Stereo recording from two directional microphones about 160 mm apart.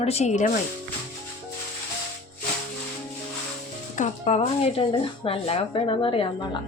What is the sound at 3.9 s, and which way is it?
A woman's voice, 50° left (ahead or behind).